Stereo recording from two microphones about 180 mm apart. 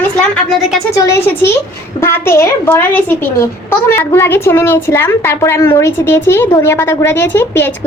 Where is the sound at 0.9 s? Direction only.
15° left (ahead or behind).